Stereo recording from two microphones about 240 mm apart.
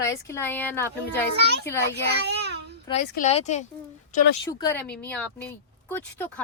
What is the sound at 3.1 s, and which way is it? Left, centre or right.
Speech, left.